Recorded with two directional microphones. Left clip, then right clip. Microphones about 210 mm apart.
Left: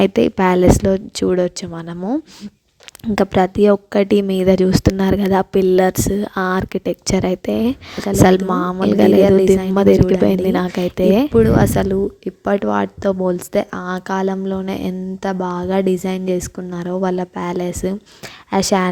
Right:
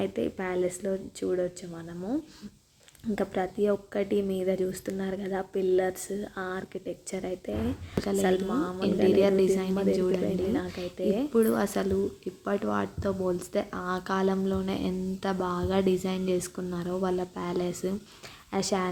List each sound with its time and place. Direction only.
0.0 s speech: 45° left (ahead or behind)
10.2 s speech: 50° left (ahead or behind)
10.7 s speech: 35° left (ahead or behind)
11.3 s speech: 35° left (ahead or behind)